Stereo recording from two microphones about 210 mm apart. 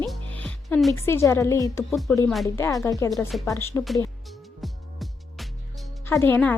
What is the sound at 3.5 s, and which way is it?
Speech, 15° left (ahead or behind).